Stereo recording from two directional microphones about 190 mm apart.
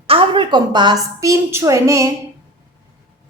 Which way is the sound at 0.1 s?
25° right (ahead or behind).